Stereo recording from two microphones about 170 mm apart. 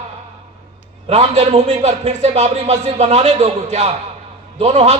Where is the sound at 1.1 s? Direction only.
35° right (ahead or behind).